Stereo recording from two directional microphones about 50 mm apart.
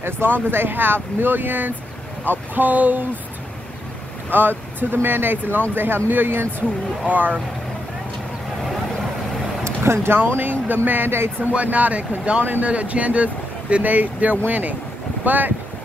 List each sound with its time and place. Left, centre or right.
0.0 s speech: right
4.3 s speech: right
9.8 s speech: right
11.5 s speech: right